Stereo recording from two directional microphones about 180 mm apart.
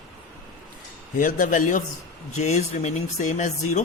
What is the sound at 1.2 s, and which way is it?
A man's voice, 45° left (ahead or behind).